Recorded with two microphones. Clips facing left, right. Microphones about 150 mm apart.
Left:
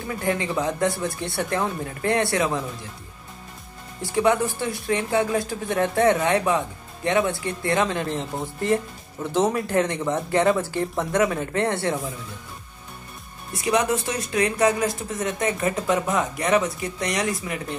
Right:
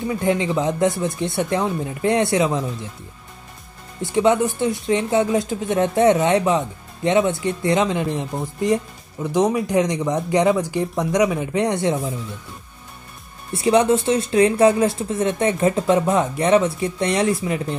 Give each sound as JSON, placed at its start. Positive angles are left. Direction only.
{"t": 0.0, "sound": "speech", "side_deg": -20}
{"t": 4.0, "sound": "speech", "side_deg": -20}
{"t": 13.5, "sound": "speech", "side_deg": -30}